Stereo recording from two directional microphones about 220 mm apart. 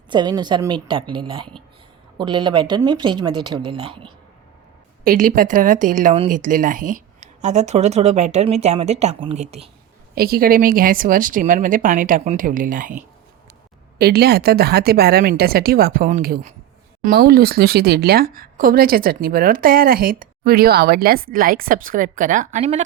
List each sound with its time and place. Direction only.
0.1 s speech: 20° right (ahead or behind)
5.0 s speech: 35° right (ahead or behind)
10.2 s speech: 45° right (ahead or behind)
14.0 s speech: 45° right (ahead or behind)